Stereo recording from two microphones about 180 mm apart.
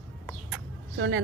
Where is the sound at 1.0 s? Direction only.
90° right.